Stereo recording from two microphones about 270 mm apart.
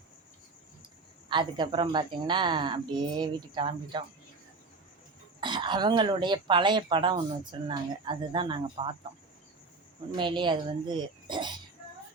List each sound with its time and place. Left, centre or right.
1.3 s speech: centre
5.4 s speech: centre
10.2 s speech: centre